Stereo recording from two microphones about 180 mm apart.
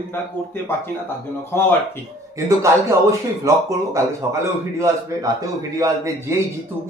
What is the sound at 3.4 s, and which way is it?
Speech, 15° right (ahead or behind).